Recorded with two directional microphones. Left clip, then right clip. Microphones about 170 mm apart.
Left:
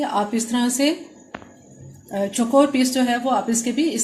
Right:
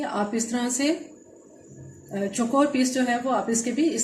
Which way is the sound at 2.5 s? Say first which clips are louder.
Left 5 dB; 40° left (ahead or behind).